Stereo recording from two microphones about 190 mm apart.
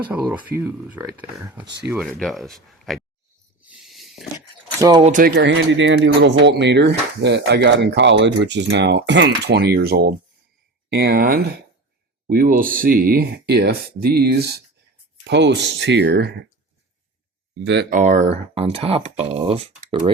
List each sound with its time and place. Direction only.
0.0 s speech: 10° right (ahead or behind)
3.6 s snake: 5° right (ahead or behind)
4.8 s speech: 20° right (ahead or behind)
5.0 s speech: 40° right (ahead or behind)
5.3 s speech: 70° right (ahead or behind)
17.6 s speech: 65° right (ahead or behind)
17.9 s speech: 40° right (ahead or behind)